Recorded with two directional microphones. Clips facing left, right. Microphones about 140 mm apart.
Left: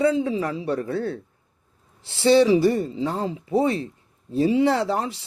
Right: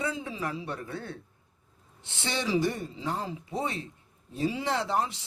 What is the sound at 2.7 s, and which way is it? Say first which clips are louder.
Speech: left 8 dB; 35° left (ahead or behind).